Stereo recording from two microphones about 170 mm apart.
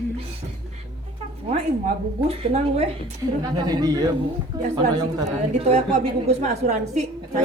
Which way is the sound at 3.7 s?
20° right (ahead or behind).